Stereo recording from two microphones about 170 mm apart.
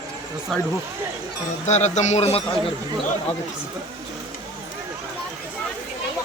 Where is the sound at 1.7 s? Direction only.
40° left (ahead or behind).